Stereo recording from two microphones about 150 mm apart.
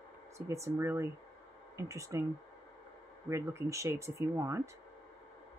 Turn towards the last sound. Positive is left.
turn(degrees=-20)  # may be behind; listen again after turning